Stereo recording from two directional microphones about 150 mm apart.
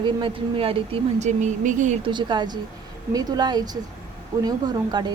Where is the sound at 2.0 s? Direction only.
30° right (ahead or behind).